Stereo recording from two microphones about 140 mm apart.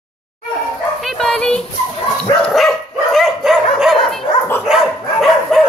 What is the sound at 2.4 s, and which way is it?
Dog, centre (ahead or behind).